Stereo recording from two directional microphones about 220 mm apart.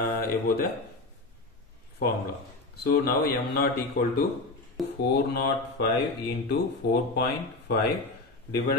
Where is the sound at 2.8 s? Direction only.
45° left (ahead or behind).